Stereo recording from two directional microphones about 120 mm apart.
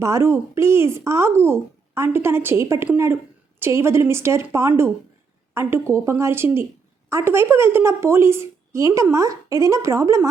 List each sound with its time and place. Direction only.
0.0 s a woman's voice: 25° right (ahead or behind)